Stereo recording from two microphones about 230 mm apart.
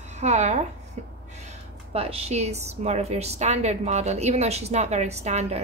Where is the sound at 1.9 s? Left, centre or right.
Right.